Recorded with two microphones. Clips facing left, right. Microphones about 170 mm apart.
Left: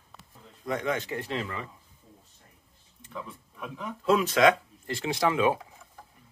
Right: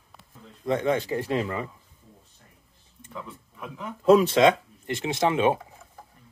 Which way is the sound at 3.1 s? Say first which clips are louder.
Right 1 dB; centre (ahead or behind).